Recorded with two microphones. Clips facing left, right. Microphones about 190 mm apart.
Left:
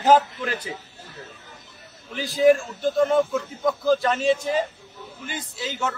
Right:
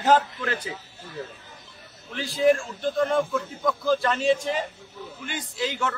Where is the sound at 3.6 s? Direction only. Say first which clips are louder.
Left 3 dB; 20° left (ahead or behind).